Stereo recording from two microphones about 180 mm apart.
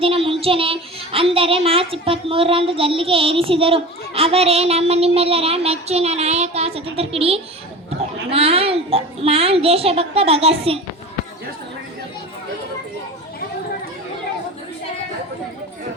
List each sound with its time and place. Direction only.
0.0 s a child's voice: 30° right (ahead or behind)